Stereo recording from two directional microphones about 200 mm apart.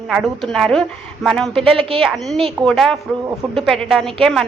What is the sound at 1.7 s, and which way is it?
Speech, 25° right (ahead or behind).